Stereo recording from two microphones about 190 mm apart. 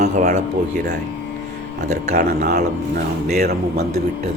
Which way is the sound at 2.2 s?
55° right (ahead or behind).